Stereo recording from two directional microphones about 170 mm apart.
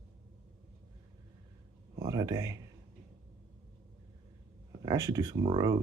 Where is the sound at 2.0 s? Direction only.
20° right (ahead or behind).